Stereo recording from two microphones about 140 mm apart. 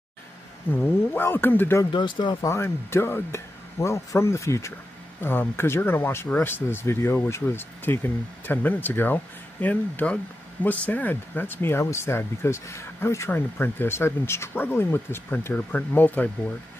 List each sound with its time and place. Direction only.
0.7 s speech: 15° left (ahead or behind)
1.9 s speech: 35° left (ahead or behind)
2.4 s speech: 20° left (ahead or behind)